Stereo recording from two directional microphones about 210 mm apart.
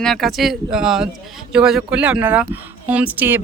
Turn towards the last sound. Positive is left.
turn(degrees=-10)  # may be behind; listen again after turning